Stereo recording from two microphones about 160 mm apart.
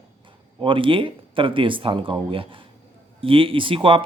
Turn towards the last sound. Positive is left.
turn(degrees=-35)  # may be behind; listen again after turning